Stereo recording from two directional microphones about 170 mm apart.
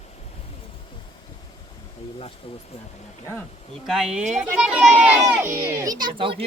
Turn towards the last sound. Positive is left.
turn(degrees=-30)  # may be behind; listen again after turning